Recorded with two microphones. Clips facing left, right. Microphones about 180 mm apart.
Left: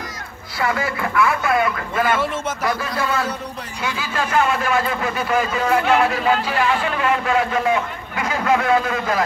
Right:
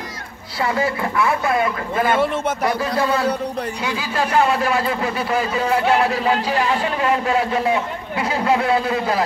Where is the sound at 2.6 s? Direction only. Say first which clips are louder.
Right 2 dB; 30° right (ahead or behind).